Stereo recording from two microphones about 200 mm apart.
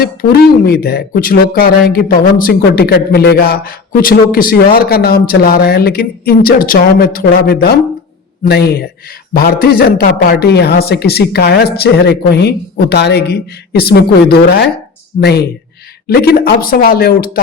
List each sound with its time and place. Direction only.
0.0 s speech: 50° left (ahead or behind)